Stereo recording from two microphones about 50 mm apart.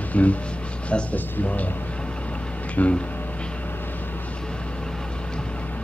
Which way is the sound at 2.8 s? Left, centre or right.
Left.